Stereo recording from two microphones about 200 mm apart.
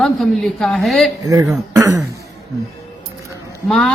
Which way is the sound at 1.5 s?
15° right (ahead or behind).